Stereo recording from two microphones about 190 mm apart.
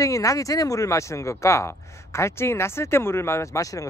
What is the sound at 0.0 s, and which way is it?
Speech, 15° left (ahead or behind).